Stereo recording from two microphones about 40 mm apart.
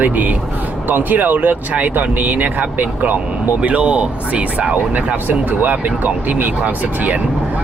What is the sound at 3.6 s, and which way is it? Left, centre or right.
Speech, right.